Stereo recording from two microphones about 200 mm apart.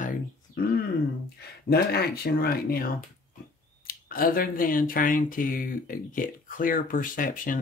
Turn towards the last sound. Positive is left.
turn(degrees=40)  # may be behind; listen again after turning